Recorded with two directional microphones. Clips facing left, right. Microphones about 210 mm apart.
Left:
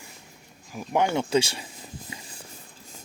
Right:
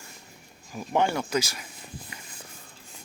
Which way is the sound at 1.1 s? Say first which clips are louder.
Left 4 dB; 25° left (ahead or behind).